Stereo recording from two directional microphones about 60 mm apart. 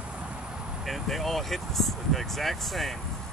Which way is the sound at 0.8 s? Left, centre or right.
Centre.